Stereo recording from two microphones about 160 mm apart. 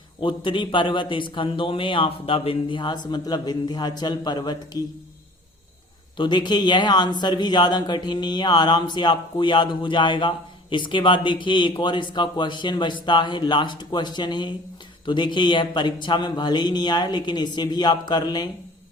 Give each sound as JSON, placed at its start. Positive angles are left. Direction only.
{"t": 0.2, "sound": "a man's voice", "side_deg": 30}
{"t": 6.1, "sound": "a man's voice", "side_deg": 30}